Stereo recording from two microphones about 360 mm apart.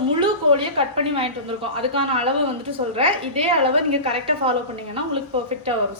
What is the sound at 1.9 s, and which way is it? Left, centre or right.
A woman's voice, centre.